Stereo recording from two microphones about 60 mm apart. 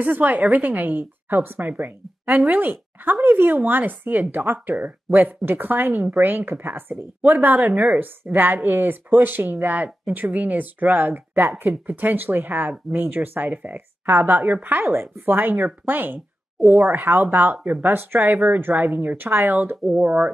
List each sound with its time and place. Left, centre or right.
0.0 s a woman's voice: right